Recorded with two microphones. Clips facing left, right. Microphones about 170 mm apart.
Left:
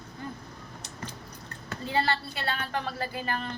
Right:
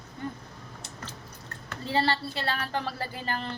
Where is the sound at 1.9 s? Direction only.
30° right (ahead or behind).